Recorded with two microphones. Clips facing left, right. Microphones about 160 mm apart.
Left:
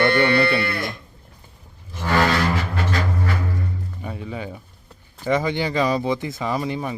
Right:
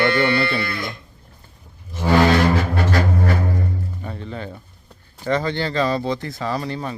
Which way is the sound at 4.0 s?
10° left (ahead or behind).